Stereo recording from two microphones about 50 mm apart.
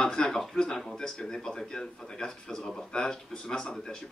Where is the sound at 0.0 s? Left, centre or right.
Centre.